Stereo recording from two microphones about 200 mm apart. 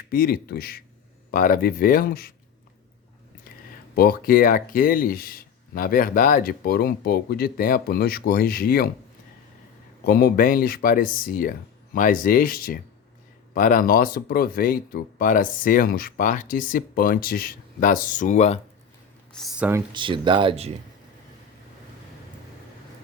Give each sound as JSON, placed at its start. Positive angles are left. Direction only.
{"t": 0.1, "sound": "speech", "side_deg": 45}
{"t": 3.9, "sound": "speech", "side_deg": 50}
{"t": 10.1, "sound": "speech", "side_deg": 45}
{"t": 19.3, "sound": "speech", "side_deg": 0}
{"t": 19.9, "sound": "speech", "side_deg": -25}